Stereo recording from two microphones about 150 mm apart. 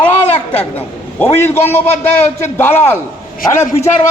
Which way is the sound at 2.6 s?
15° left (ahead or behind).